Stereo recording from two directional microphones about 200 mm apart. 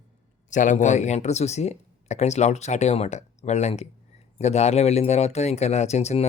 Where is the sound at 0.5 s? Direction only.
40° left (ahead or behind).